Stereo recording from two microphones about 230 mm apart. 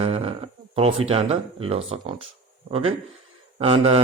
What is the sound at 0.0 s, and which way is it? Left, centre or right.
Speech, right.